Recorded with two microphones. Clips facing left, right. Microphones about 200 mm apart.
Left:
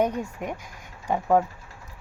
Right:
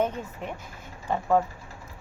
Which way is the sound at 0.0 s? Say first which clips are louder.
Left 3 dB; 15° left (ahead or behind).